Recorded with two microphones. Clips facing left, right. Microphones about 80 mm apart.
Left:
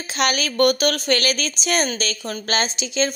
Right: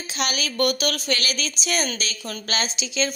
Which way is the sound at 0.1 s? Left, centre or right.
Left.